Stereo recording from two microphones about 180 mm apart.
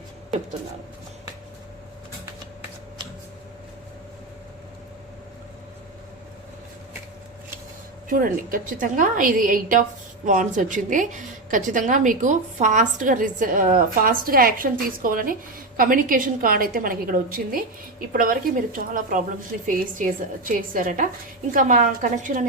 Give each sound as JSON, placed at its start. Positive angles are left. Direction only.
{"t": 8.1, "sound": "a woman's voice", "side_deg": -50}